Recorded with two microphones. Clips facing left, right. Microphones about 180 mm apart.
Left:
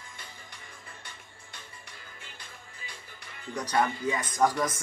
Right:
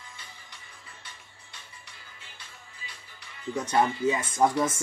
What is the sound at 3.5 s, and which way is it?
Speech, 25° right (ahead or behind).